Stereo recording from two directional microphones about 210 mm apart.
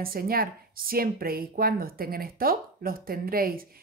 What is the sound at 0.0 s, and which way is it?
A woman's voice, 45° right (ahead or behind).